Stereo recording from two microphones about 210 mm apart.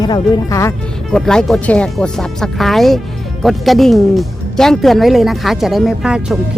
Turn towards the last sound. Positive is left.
turn(degrees=-5)  # may be behind; listen again after turning